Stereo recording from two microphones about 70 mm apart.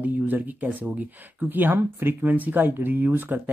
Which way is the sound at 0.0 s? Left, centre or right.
Right.